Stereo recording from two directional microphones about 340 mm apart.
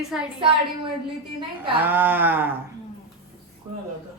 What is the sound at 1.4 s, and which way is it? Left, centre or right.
A man's voice, centre.